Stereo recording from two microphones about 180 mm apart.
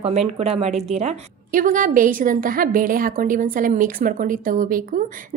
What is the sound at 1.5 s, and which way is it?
A woman's voice, 50° right (ahead or behind).